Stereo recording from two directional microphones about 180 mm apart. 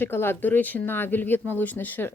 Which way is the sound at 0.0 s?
10° left (ahead or behind).